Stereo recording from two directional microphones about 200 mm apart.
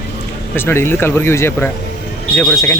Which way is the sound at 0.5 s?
10° left (ahead or behind).